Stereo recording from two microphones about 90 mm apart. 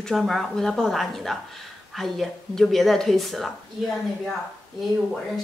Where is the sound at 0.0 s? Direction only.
Centre (ahead or behind).